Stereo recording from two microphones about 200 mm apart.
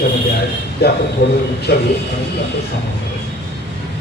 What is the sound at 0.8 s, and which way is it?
A man's voice, 55° left (ahead or behind).